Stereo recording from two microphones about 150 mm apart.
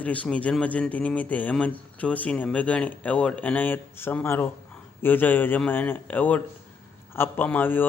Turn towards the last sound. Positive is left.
turn(degrees=15)  # may be behind; listen again after turning